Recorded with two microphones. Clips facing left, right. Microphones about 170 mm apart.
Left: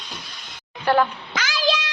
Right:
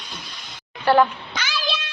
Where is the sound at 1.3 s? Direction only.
90° left.